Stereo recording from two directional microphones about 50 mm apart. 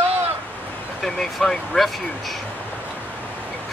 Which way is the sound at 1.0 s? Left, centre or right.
Centre.